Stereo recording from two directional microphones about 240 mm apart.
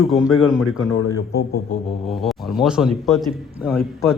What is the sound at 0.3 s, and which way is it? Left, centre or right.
Speech, left.